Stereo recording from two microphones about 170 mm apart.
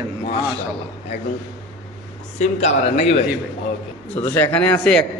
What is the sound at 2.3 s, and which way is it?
Speech, 40° left (ahead or behind).